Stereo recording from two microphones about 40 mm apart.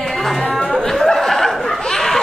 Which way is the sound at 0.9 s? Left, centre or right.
Centre.